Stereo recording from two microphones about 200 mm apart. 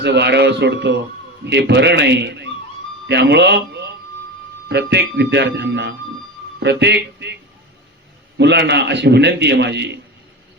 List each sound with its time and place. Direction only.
0.0 s a man's voice: 55° right (ahead or behind)
8.4 s a man's voice: 60° right (ahead or behind)